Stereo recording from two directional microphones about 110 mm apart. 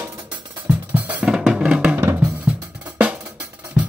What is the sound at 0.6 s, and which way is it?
Drum kit, 15° right (ahead or behind).